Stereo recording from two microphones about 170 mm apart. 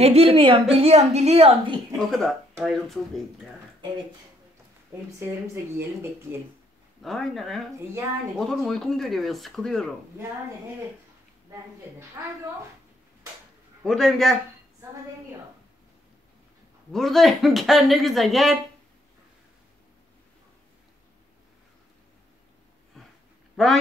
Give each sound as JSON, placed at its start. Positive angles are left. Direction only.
{"t": 0.0, "sound": "a woman's voice", "side_deg": -35}
{"t": 2.0, "sound": "speech", "side_deg": 0}
{"t": 7.0, "sound": "speech", "side_deg": 0}
{"t": 13.8, "sound": "speech", "side_deg": 0}
{"t": 16.9, "sound": "speech", "side_deg": 0}
{"t": 23.0, "sound": "a sound", "side_deg": 5}
{"t": 23.5, "sound": "speech", "side_deg": 0}